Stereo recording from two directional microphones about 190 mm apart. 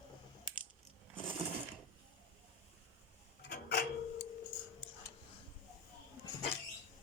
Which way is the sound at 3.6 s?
55° left (ahead or behind).